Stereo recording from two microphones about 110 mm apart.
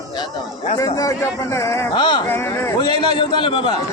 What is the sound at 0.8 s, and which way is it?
A man's voice, 30° left (ahead or behind).